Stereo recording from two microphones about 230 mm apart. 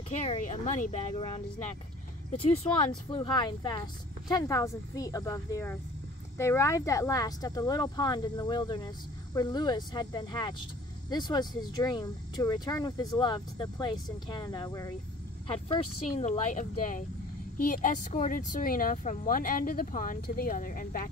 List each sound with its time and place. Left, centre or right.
0.2 s speech: left
16.2 s speech: left